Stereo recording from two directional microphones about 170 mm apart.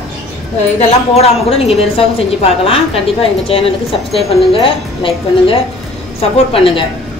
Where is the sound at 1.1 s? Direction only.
35° left (ahead or behind).